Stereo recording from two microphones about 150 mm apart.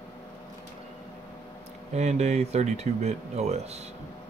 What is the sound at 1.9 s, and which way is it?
Speech, 50° right (ahead or behind).